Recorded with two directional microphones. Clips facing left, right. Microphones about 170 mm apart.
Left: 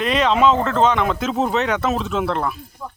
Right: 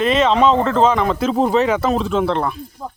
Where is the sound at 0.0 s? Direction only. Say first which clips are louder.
Right 2 dB; centre (ahead or behind).